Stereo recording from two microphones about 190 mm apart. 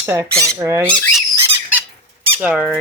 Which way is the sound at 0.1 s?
15° right (ahead or behind).